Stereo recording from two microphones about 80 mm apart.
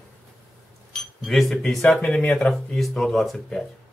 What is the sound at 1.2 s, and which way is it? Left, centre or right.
Speech, centre.